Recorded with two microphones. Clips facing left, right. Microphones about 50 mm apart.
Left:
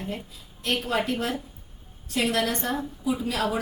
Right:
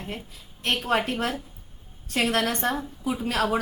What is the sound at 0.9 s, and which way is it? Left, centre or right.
Speech, right.